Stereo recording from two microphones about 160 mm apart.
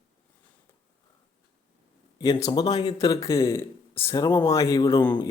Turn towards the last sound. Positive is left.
turn(degrees=20)  # may be behind; listen again after turning